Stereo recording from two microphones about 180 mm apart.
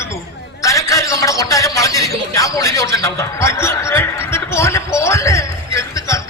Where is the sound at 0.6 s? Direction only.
15° left (ahead or behind).